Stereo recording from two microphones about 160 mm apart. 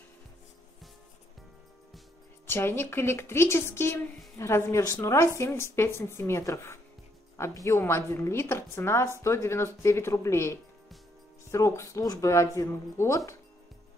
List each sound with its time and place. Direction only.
2.4 s a woman's voice: 15° left (ahead or behind)